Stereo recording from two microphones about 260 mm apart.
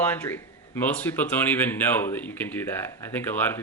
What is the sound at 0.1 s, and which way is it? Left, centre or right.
A woman's voice, centre.